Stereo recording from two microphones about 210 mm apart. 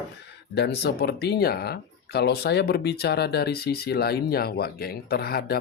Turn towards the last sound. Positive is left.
turn(degrees=50)  # may be behind; listen again after turning